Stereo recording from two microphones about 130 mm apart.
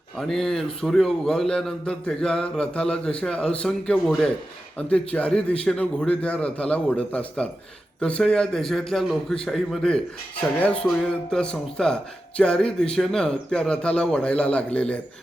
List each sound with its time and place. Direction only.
0.2 s a man's voice: centre (ahead or behind)